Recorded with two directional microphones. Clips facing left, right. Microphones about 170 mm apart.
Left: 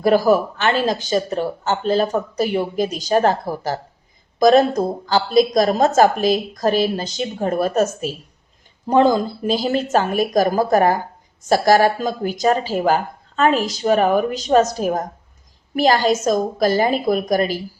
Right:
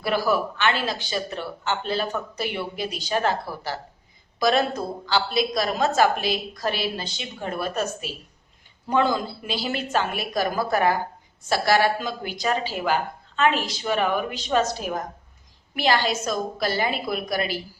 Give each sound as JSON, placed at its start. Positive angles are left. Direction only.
{"t": 0.0, "sound": "a woman's voice", "side_deg": 40}